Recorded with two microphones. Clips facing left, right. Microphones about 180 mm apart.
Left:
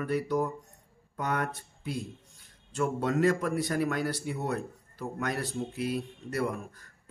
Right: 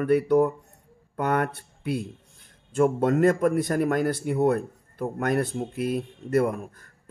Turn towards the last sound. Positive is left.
turn(degrees=-50)  # may be behind; listen again after turning